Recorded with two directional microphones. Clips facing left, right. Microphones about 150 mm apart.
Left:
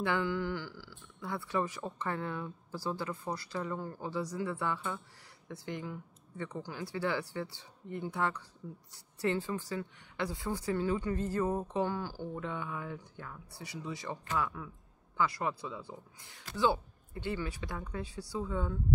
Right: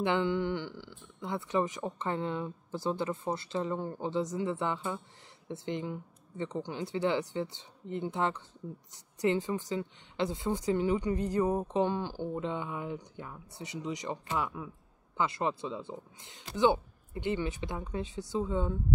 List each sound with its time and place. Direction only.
0.0 s a woman's voice: 20° right (ahead or behind)